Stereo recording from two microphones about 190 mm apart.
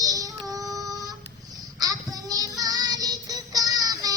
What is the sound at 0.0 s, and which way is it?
Child singing, 20° right (ahead or behind).